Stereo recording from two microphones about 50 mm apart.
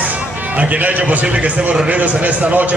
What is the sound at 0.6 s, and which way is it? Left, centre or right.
A man's voice, right.